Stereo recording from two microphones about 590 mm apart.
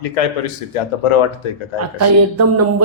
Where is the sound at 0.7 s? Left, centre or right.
Left.